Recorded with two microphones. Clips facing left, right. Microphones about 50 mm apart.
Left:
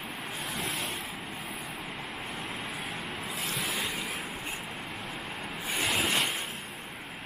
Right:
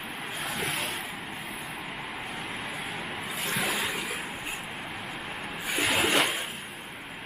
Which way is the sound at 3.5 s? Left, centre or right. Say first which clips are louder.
Right 5 dB; centre.